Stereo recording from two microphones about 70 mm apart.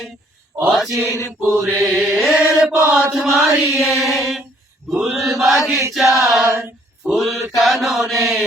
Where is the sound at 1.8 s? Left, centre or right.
Centre.